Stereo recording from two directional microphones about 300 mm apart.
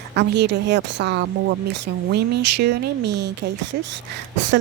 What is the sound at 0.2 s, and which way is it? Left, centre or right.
A woman's voice, right.